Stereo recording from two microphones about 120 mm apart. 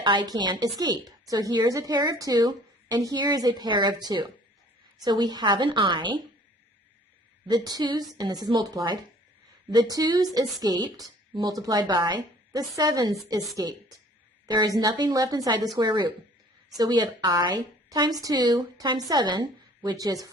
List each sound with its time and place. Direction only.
0.0 s a woman's voice: 40° right (ahead or behind)
7.4 s a woman's voice: 35° right (ahead or behind)